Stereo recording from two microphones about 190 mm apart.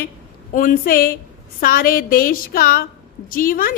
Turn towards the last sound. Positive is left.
turn(degrees=50)  # may be behind; listen again after turning